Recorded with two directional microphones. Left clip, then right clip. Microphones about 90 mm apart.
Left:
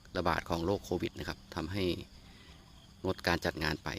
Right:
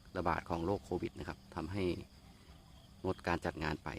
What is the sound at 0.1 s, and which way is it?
Speech, 30° left (ahead or behind).